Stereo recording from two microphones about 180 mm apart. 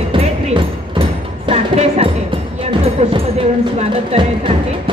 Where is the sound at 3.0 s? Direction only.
35° right (ahead or behind).